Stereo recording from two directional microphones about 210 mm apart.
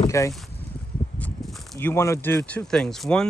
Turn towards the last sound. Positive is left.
turn(degrees=0)  # may be behind; listen again after turning